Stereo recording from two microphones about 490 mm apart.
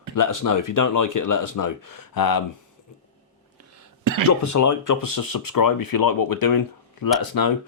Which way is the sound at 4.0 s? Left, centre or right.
Right.